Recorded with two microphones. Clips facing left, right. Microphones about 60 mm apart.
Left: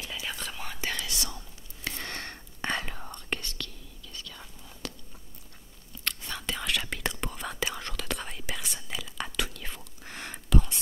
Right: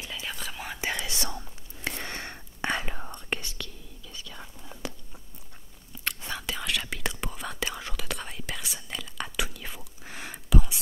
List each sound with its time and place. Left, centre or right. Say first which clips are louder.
0.1 s whispering: even; centre
1.2 s whispering: right 4 dB; right
2.0 s whispering: right 1 dB; centre
6.0 s whispering: right 2 dB; centre
6.4 s whispering: left 1 dB; centre